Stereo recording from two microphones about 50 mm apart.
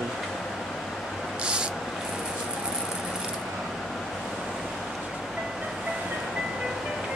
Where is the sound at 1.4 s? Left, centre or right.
Centre.